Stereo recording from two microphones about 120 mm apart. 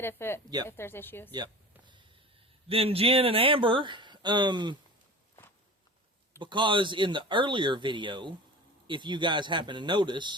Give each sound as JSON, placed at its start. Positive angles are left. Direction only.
{"t": 0.0, "sound": "speech", "side_deg": 20}
{"t": 2.6, "sound": "speech", "side_deg": -55}
{"t": 6.4, "sound": "speech", "side_deg": -40}